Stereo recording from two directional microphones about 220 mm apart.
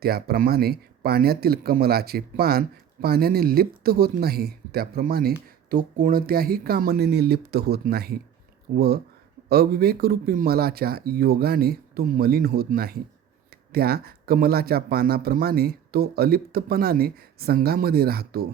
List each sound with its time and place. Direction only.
0.0 s speech: 45° right (ahead or behind)